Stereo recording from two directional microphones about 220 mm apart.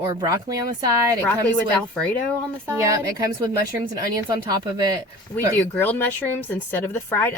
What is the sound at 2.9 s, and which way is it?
Speech, 15° right (ahead or behind).